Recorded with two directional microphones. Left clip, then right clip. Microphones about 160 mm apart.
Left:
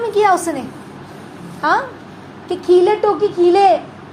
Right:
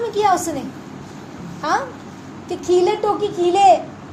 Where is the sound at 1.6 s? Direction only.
30° left (ahead or behind).